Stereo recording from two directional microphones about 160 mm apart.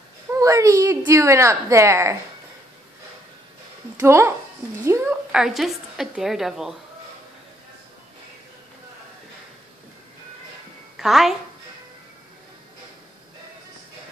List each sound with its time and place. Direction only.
0.3 s a woman's voice: 20° right (ahead or behind)
3.9 s a woman's voice: 15° right (ahead or behind)
5.3 s a woman's voice: centre (ahead or behind)
11.0 s a woman's voice: centre (ahead or behind)